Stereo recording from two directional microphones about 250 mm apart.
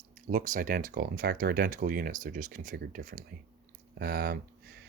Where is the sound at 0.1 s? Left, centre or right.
Right.